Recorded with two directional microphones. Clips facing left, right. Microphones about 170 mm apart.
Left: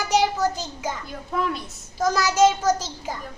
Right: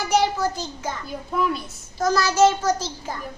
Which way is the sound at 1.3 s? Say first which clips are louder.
Right 2 dB; 5° right (ahead or behind).